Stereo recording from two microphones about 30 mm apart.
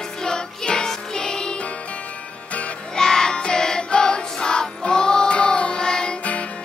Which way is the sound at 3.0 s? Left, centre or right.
Left.